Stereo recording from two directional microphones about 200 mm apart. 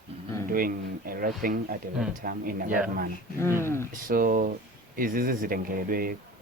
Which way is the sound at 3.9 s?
45° right (ahead or behind).